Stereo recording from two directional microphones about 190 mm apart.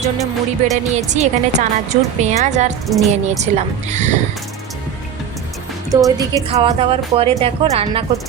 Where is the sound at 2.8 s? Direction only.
Centre (ahead or behind).